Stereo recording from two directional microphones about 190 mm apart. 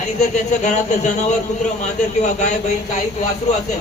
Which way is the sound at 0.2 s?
40° left (ahead or behind).